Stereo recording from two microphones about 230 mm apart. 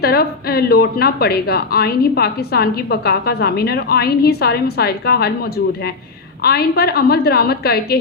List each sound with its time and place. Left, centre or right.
0.0 s a woman's voice: left